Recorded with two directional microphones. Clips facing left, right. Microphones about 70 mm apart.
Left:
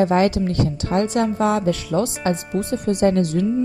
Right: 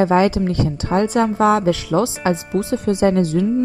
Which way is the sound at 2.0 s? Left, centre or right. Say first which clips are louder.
Right 2 dB; right.